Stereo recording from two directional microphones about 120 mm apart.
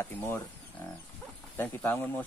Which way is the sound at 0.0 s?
20° left (ahead or behind).